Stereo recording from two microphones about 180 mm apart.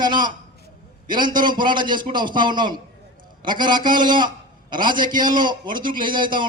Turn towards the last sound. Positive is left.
turn(degrees=-25)  # may be behind; listen again after turning